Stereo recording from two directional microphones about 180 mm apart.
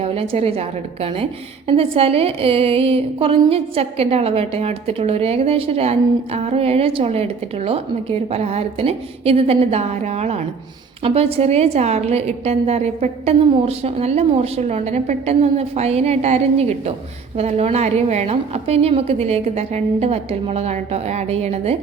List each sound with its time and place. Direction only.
0.0 s a woman's voice: 35° right (ahead or behind)